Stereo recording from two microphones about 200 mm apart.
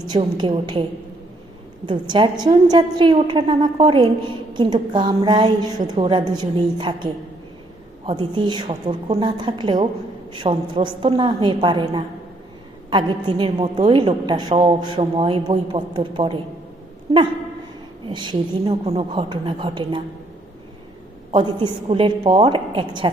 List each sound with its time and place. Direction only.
0.1 s a woman's voice: 20° right (ahead or behind)
1.9 s a woman's voice: 25° right (ahead or behind)
18.0 s a woman's voice: 20° right (ahead or behind)
21.3 s a woman's voice: 25° right (ahead or behind)